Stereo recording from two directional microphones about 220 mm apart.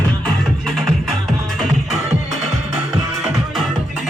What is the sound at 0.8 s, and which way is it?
Music, centre (ahead or behind).